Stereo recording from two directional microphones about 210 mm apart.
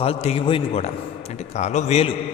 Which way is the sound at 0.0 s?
30° left (ahead or behind).